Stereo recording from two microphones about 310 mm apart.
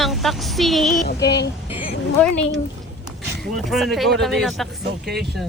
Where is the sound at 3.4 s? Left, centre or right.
Centre.